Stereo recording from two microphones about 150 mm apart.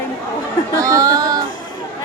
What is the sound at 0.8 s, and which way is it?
Speech, 20° right (ahead or behind).